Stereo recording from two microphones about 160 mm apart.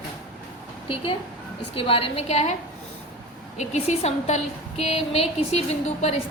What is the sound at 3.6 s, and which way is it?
A woman's voice, 45° left (ahead or behind).